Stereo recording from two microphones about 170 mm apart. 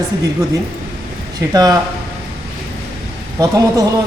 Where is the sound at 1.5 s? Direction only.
25° right (ahead or behind).